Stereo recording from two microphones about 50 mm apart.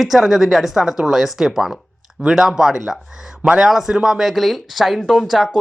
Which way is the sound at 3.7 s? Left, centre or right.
Centre.